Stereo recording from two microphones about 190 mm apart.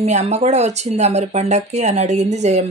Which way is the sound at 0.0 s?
35° right (ahead or behind).